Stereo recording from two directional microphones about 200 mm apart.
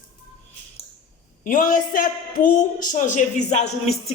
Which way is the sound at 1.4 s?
40° left (ahead or behind).